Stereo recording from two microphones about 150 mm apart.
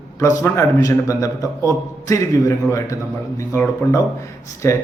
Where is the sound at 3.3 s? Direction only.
20° left (ahead or behind).